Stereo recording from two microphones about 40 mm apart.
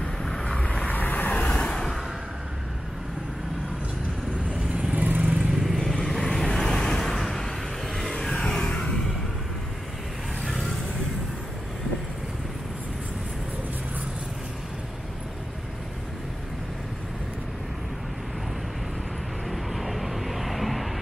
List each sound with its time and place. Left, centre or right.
0.0 s vehicle: centre
0.6 s vehicle: left
0.8 s vehicle: left
1.3 s vehicle: left
4.9 s vehicle: right
5.4 s vehicle: centre
5.9 s vehicle: centre
8.5 s music: centre
10.4 s vehicle: centre
19.5 s vehicle: centre